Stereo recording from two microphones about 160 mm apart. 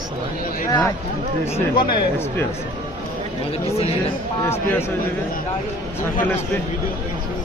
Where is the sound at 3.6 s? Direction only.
40° left (ahead or behind).